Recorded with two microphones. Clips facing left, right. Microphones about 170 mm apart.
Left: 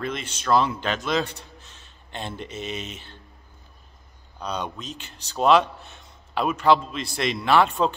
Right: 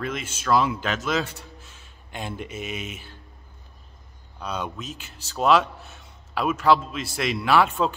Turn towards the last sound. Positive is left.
turn(degrees=-5)  # may be behind; listen again after turning